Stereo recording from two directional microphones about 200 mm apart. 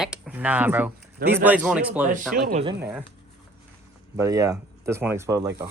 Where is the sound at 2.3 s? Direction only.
35° right (ahead or behind).